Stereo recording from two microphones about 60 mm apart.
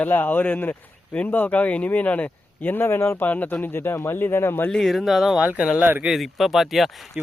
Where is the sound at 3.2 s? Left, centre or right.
Left.